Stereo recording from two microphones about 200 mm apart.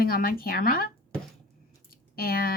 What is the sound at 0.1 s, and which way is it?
Speech, 45° left (ahead or behind).